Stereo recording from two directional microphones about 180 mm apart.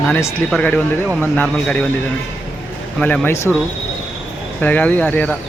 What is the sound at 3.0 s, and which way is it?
Speech, 5° left (ahead or behind).